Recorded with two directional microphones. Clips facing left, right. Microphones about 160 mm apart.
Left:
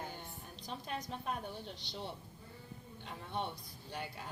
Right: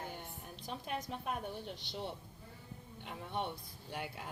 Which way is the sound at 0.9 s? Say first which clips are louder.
Right 1 dB; 10° right (ahead or behind).